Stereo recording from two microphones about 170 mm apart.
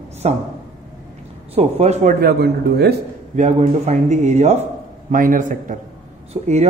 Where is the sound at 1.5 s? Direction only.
40° right (ahead or behind).